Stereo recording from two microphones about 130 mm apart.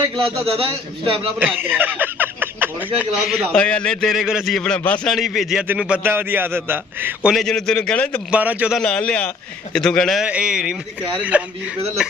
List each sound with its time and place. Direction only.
0.6 s a man's voice: 45° right (ahead or behind)
1.6 s speech: 15° right (ahead or behind)
3.2 s a man's voice: centre (ahead or behind)
3.5 s a man's voice: 10° left (ahead or behind)
5.1 s a man's voice: centre (ahead or behind)
7.3 s a man's voice: 5° left (ahead or behind)
8.3 s a man's voice: 10° right (ahead or behind)
8.7 s a man's voice: 10° left (ahead or behind)
10.2 s a man's voice: 5° right (ahead or behind)